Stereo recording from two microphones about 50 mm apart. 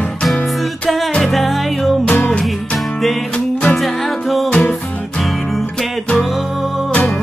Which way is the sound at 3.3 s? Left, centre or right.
Left.